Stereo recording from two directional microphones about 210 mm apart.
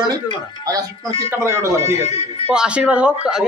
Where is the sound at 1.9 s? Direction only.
30° left (ahead or behind).